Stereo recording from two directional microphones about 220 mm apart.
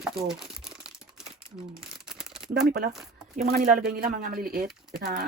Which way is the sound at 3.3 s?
40° right (ahead or behind).